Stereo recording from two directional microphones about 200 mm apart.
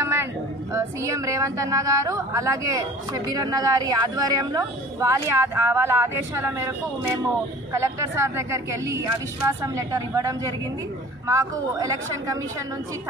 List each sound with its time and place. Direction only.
0.0 s a sound: 15° right (ahead or behind)
0.7 s speech: 15° right (ahead or behind)
7.7 s speech: 15° right (ahead or behind)